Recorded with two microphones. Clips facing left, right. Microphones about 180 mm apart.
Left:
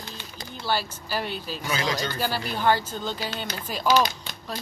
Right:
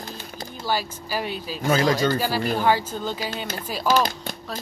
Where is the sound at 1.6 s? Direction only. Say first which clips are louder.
Right 9 dB; 45° right (ahead or behind).